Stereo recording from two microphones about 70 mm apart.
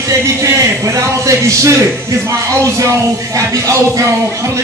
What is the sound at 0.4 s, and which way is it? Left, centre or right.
Speech, right.